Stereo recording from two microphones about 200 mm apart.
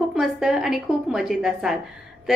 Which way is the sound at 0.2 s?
5° right (ahead or behind).